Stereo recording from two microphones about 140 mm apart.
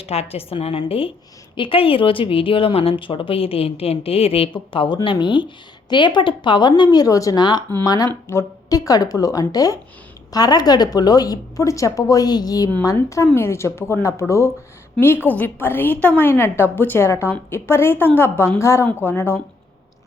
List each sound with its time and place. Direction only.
0.0 s a woman's voice: 45° left (ahead or behind); by 19.4 s 15° left (ahead or behind)